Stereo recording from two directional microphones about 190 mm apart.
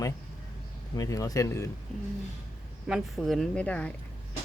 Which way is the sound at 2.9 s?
Centre (ahead or behind).